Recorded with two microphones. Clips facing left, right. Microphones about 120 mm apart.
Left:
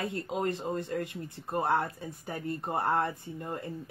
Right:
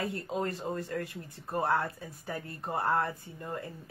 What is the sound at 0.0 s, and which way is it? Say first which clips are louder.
Speech: left 1 dB; 25° left (ahead or behind).